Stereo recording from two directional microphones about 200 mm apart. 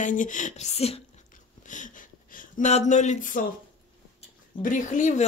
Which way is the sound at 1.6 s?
40° left (ahead or behind).